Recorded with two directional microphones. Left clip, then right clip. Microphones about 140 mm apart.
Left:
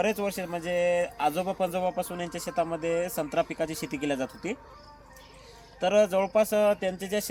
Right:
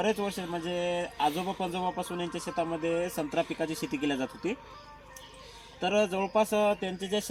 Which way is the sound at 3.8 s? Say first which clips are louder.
Even; 45° left (ahead or behind).